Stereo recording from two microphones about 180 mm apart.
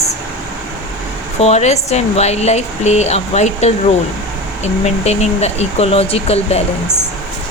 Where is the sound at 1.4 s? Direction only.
35° left (ahead or behind).